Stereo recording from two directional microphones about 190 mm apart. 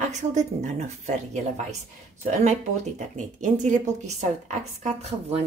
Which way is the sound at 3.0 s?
40° right (ahead or behind).